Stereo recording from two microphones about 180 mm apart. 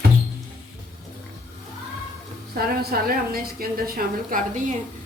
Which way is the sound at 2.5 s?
55° right (ahead or behind).